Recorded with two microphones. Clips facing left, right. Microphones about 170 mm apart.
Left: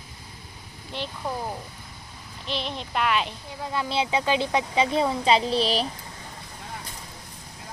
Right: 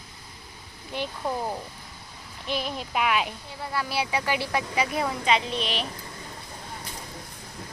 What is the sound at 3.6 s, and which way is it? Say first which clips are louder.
A woman's voice: left 2 dB; 20° left (ahead or behind).